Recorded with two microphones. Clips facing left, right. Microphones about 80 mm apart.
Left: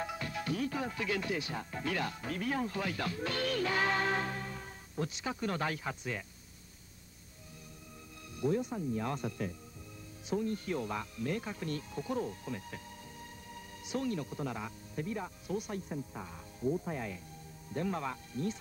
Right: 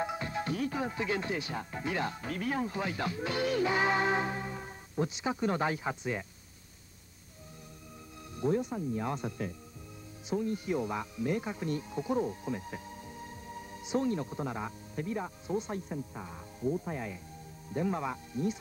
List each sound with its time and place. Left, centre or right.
0.0 s speech: right
8.4 s speech: right
16.1 s speech: centre